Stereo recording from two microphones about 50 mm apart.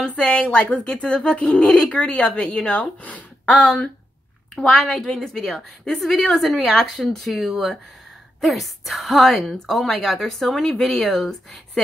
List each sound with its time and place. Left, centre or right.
0.0 s speech: centre
3.5 s a woman's voice: centre